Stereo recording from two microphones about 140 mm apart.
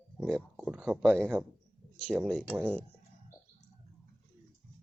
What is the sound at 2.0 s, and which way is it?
Speech, 5° left (ahead or behind).